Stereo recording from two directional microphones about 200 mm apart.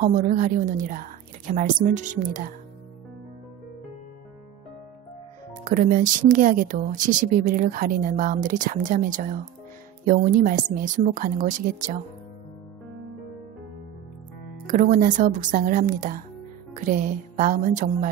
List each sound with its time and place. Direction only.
0.0 s speech: 40° right (ahead or behind)
5.6 s speech: 40° right (ahead or behind)
14.7 s speech: 40° right (ahead or behind)